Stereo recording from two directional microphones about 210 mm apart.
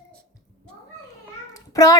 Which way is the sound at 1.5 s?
15° left (ahead or behind).